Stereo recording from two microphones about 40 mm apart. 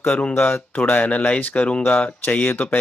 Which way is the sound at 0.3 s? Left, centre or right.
Left.